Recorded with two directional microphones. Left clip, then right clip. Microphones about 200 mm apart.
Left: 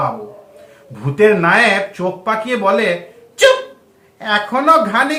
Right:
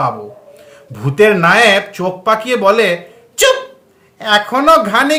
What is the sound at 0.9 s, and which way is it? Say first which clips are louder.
A woman's voice: right 2 dB; 55° right (ahead or behind).